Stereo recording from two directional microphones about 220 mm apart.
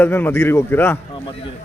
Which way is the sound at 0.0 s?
10° left (ahead or behind).